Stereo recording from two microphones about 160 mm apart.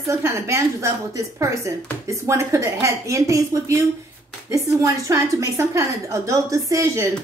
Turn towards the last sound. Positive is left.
turn(degrees=-20)  # may be behind; listen again after turning